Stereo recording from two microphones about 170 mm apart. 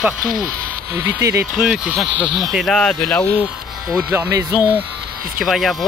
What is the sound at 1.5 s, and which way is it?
Speech, centre (ahead or behind).